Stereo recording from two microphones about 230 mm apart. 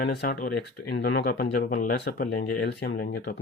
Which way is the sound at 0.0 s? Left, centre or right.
Left.